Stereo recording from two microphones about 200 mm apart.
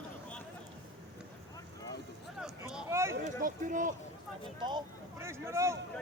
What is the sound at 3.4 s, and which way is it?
Speech, 40° right (ahead or behind).